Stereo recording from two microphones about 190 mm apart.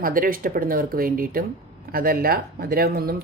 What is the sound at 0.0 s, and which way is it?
Speech, 50° right (ahead or behind).